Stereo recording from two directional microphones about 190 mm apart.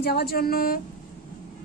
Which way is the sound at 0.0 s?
55° left (ahead or behind).